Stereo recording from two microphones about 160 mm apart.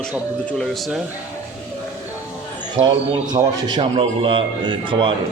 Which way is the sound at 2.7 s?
30° right (ahead or behind).